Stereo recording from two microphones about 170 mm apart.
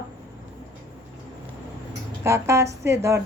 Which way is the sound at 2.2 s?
15° right (ahead or behind).